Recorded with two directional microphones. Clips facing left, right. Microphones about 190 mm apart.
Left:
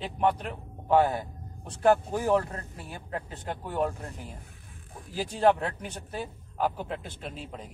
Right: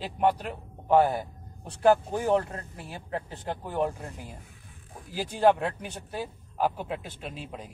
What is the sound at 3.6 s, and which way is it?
Speech, 15° right (ahead or behind).